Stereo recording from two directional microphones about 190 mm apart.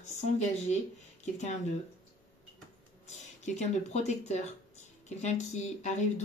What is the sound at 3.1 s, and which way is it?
Speech, 35° left (ahead or behind).